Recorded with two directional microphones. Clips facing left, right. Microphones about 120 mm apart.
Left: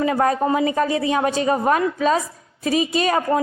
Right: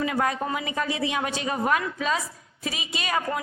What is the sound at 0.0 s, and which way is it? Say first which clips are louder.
A woman's voice: left 7 dB; 35° left (ahead or behind).